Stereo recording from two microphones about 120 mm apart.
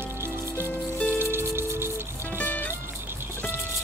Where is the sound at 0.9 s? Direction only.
15° left (ahead or behind).